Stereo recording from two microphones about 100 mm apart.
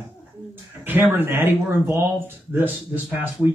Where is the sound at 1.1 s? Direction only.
25° right (ahead or behind).